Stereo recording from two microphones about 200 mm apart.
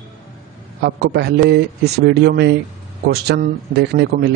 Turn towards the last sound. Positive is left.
turn(degrees=-55)  # may be behind; listen again after turning